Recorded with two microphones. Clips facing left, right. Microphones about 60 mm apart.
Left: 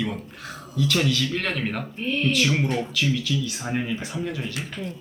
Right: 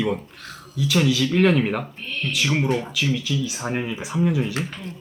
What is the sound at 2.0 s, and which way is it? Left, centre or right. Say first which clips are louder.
Speech: left 5 dB; centre.